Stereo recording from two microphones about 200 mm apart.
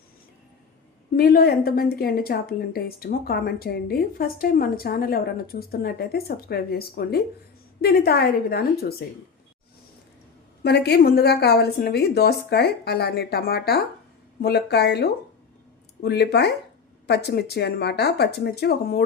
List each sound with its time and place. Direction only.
1.1 s speech: 50° left (ahead or behind)
10.6 s speech: 55° left (ahead or behind)